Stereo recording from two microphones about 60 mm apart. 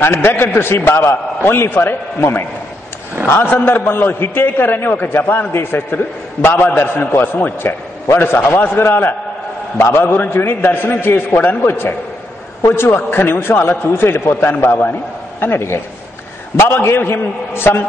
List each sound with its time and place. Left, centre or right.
0.0 s a man's voice: left
14.4 s a man's voice: left
15.4 s a man's voice: left